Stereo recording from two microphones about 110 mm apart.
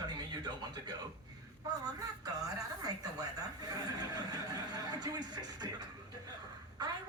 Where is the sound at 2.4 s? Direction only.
35° right (ahead or behind).